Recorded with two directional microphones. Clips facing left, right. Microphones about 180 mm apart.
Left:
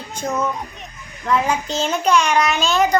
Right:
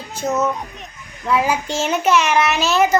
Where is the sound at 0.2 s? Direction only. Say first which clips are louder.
Right 3 dB; 5° right (ahead or behind).